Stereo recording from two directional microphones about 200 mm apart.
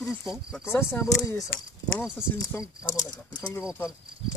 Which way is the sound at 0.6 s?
10° left (ahead or behind).